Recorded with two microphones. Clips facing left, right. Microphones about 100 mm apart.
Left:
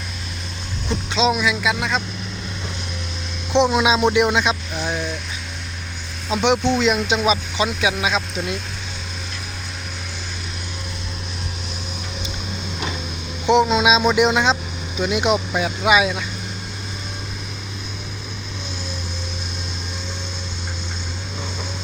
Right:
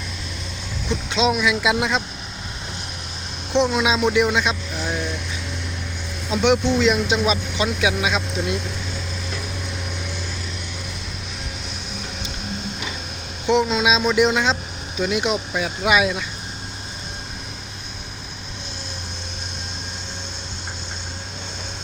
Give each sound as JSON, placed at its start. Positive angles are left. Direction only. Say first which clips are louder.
{"t": 0.9, "sound": "speech", "louder": "left 1 dB", "side_deg": -5}
{"t": 1.6, "sound": "speech", "louder": "right 1 dB", "side_deg": -20}
{"t": 3.5, "sound": "speech", "louder": "left 2 dB", "side_deg": 20}
{"t": 3.8, "sound": "speech", "louder": "left 2 dB", "side_deg": 5}
{"t": 6.3, "sound": "speech", "louder": "even", "side_deg": 0}
{"t": 13.7, "sound": "speech", "louder": "left 2 dB", "side_deg": 10}